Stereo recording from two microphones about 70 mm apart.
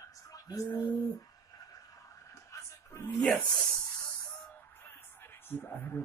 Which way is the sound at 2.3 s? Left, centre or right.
Left.